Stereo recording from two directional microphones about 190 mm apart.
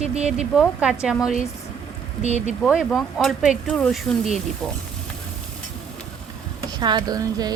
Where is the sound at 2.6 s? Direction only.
Centre (ahead or behind).